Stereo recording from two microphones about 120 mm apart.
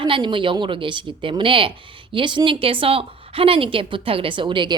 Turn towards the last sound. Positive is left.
turn(degrees=-40)  # may be behind; listen again after turning